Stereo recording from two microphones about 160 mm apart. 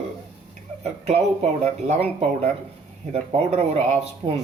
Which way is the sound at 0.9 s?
40° right (ahead or behind).